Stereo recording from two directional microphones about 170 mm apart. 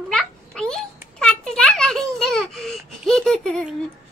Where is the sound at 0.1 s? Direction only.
5° left (ahead or behind).